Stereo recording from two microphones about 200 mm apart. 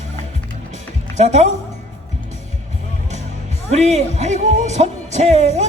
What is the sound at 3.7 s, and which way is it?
Speech, 35° right (ahead or behind).